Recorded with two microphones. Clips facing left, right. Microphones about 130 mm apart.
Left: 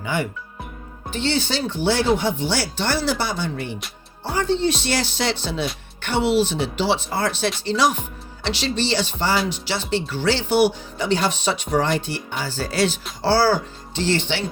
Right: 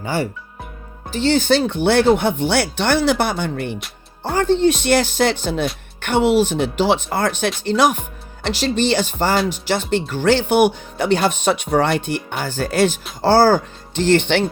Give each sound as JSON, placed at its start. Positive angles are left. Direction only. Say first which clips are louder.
{"t": 0.0, "sound": "speech", "louder": "right 3 dB", "side_deg": -35}